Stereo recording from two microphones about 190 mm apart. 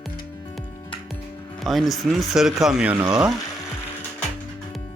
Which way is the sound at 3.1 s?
20° right (ahead or behind).